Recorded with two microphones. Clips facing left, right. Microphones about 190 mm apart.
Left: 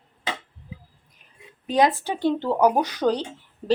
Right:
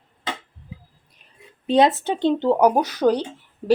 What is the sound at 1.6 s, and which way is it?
A woman's voice, 25° right (ahead or behind).